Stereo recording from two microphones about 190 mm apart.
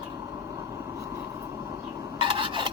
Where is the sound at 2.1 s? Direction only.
25° right (ahead or behind).